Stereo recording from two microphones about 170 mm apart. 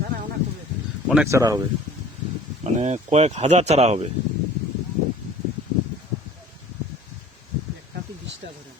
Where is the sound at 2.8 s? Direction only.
40° right (ahead or behind).